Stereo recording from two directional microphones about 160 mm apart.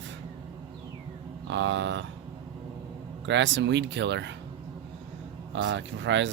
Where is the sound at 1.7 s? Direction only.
90° right.